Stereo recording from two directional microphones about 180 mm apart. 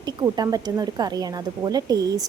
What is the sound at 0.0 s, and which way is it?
Speech, 20° right (ahead or behind).